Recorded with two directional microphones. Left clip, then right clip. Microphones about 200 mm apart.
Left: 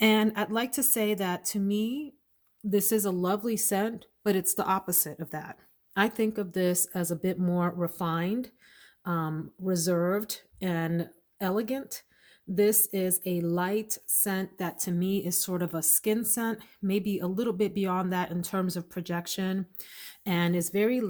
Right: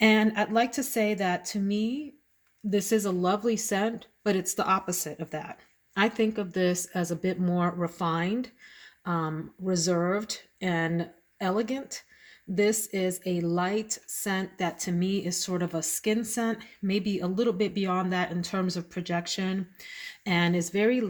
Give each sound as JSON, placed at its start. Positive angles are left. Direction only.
{"t": 0.0, "sound": "a woman's voice", "side_deg": 35}